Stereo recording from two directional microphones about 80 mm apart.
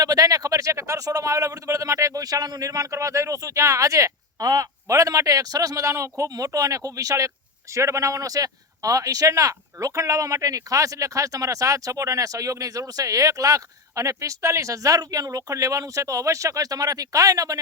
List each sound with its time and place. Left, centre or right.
0.0 s speech: right